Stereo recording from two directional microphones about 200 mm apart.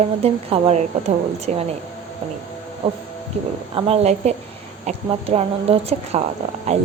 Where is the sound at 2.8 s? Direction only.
30° right (ahead or behind).